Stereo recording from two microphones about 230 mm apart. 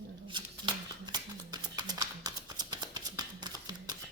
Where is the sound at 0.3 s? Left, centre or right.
Centre.